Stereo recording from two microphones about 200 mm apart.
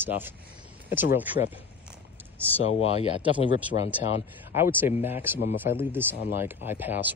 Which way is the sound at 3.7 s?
60° left (ahead or behind).